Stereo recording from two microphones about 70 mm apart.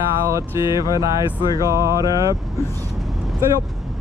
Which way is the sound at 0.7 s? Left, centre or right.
Left.